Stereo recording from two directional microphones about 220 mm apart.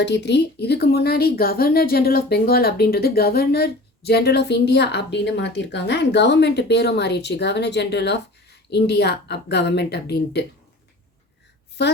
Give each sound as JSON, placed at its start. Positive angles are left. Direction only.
{"t": 0.0, "sound": "speech", "side_deg": 50}